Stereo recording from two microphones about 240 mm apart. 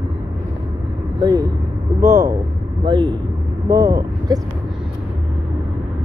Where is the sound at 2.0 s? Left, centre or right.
Centre.